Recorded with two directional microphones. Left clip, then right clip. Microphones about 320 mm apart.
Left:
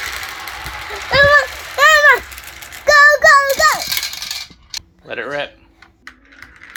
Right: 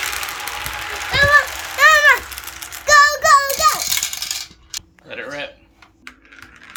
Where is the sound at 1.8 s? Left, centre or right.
Left.